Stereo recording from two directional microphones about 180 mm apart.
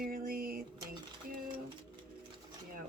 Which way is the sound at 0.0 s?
55° right (ahead or behind).